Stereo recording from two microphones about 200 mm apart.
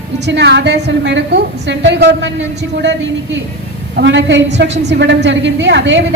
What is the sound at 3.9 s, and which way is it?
A woman's voice, 60° right (ahead or behind).